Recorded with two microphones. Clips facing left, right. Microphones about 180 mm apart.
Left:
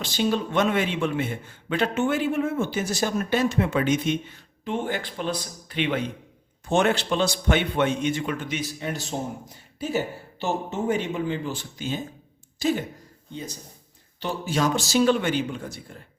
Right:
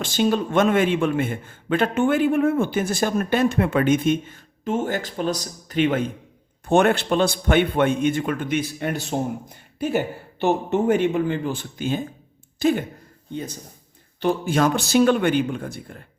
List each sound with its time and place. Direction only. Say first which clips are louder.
0.0 s a man's voice: right 4 dB; 50° right (ahead or behind)
6.7 s a man's voice: right 4 dB; 55° right (ahead or behind)
10.4 s a man's voice: right 6 dB; 60° right (ahead or behind)